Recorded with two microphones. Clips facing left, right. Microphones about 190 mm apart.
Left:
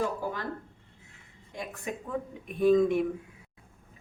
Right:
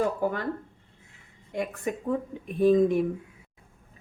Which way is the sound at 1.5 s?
55° right (ahead or behind).